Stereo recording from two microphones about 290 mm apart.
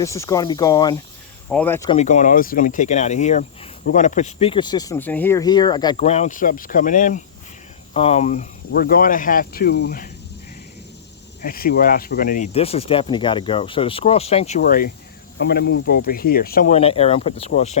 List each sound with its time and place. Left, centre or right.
0.0 s speech: centre
2.0 s speech: left
11.4 s speech: left